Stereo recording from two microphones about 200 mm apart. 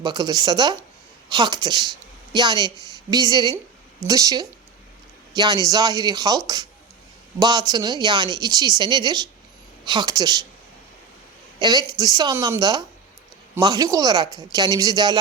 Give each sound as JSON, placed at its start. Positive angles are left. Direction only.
{"t": 0.0, "sound": "speech", "side_deg": -20}
{"t": 11.6, "sound": "speech", "side_deg": -20}